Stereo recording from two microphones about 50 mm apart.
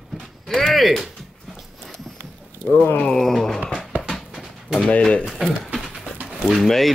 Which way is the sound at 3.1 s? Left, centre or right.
Centre.